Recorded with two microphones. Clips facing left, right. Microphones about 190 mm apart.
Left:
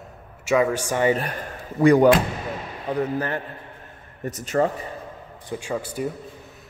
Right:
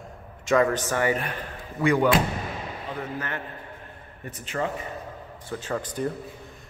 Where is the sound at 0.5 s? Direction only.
10° left (ahead or behind).